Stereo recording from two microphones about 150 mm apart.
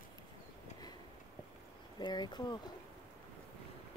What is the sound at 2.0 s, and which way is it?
Speech, 30° left (ahead or behind).